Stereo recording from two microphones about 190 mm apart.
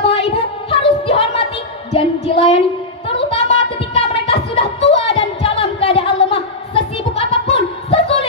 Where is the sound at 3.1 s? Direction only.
30° left (ahead or behind).